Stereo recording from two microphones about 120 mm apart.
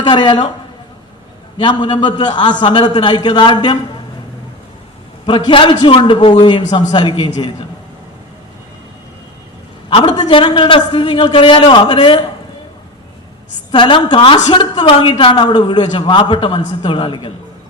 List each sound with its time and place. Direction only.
0.0 s a man's voice: 40° left (ahead or behind)
1.5 s a man's voice: 45° left (ahead or behind)
5.2 s a man's voice: 45° left (ahead or behind)
9.9 s a man's voice: 40° left (ahead or behind)
13.7 s a man's voice: 40° left (ahead or behind)